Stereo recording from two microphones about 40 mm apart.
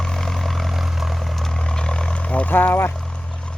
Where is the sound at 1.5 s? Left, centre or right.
Centre.